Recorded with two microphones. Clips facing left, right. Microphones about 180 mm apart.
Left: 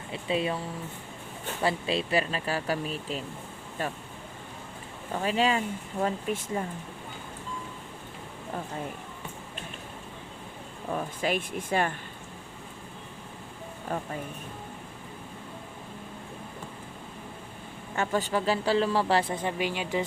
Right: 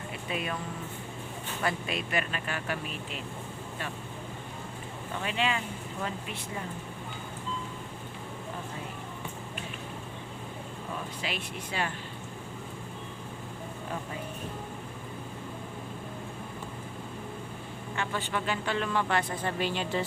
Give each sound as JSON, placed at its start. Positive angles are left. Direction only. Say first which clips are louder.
{"t": 0.1, "sound": "speech", "louder": "left 7 dB", "side_deg": 25}
{"t": 1.6, "sound": "speech", "louder": "left 5 dB", "side_deg": 30}
{"t": 5.1, "sound": "speech", "louder": "left 5 dB", "side_deg": 40}
{"t": 11.2, "sound": "speech", "louder": "left 7 dB", "side_deg": 50}
{"t": 17.9, "sound": "speech", "louder": "left 6 dB", "side_deg": 40}
{"t": 19.4, "sound": "speech", "louder": "left 1 dB", "side_deg": 15}